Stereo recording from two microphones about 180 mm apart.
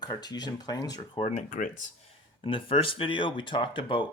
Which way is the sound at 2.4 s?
30° left (ahead or behind).